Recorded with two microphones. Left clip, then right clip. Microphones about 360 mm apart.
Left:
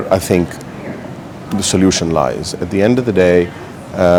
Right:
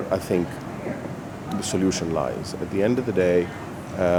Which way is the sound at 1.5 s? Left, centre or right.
Left.